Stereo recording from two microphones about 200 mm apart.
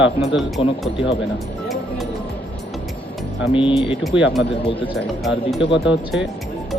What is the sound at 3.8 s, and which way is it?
Speech, 25° left (ahead or behind).